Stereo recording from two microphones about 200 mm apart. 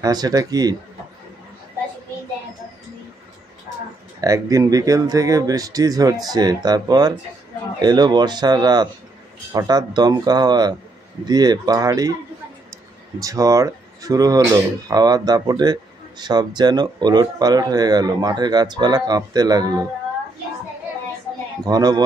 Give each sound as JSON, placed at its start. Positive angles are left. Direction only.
{"t": 0.0, "sound": "speech", "side_deg": -20}
{"t": 4.2, "sound": "speech", "side_deg": -15}
{"t": 13.2, "sound": "speech", "side_deg": -15}
{"t": 21.6, "sound": "speech", "side_deg": -20}